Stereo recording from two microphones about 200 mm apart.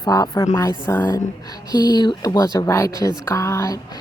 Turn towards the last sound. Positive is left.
turn(degrees=15)  # may be behind; listen again after turning